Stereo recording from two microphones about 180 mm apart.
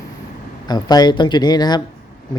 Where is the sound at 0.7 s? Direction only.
20° left (ahead or behind).